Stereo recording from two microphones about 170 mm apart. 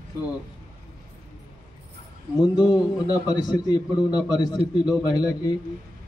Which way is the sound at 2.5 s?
20° left (ahead or behind).